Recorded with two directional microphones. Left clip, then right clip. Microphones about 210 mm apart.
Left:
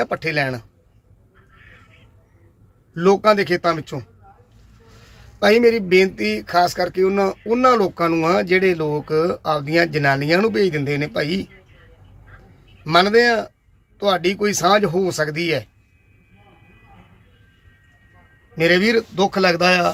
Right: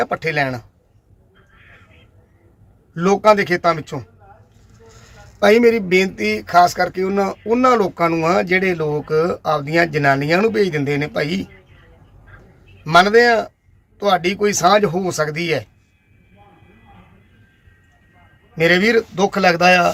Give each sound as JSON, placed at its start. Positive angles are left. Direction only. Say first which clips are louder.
{"t": 0.0, "sound": "a man's voice", "louder": "right 2 dB", "side_deg": -5}
{"t": 2.9, "sound": "a man's voice", "louder": "right 1 dB", "side_deg": -5}
{"t": 5.4, "sound": "a man's voice", "louder": "right 2 dB", "side_deg": -5}
{"t": 12.8, "sound": "a man's voice", "louder": "right 3 dB", "side_deg": -5}
{"t": 18.5, "sound": "speech", "louder": "right 2 dB", "side_deg": -5}